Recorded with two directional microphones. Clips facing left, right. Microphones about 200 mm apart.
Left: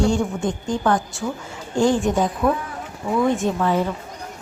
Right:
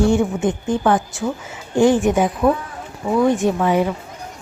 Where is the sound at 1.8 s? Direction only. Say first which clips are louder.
Right 4 dB; 20° right (ahead or behind).